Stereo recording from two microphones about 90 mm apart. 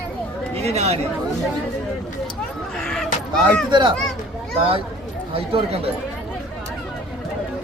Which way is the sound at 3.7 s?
60° right (ahead or behind).